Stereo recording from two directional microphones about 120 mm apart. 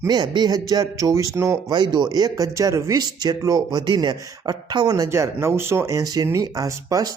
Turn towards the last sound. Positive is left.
turn(degrees=-30)  # may be behind; listen again after turning